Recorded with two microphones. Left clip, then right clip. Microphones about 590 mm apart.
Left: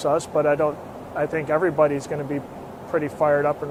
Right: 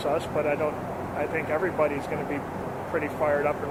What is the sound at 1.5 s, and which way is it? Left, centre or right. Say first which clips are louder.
Speech: left 7 dB; left.